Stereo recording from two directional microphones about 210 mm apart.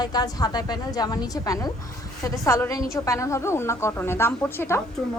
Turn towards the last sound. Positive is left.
turn(degrees=10)  # may be behind; listen again after turning